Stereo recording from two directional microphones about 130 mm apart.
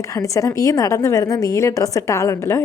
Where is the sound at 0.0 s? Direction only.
25° left (ahead or behind).